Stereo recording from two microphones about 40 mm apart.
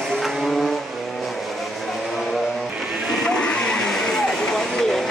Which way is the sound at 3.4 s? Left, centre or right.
Left.